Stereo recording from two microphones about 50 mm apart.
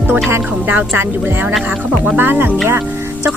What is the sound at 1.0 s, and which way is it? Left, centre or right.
Speech, right.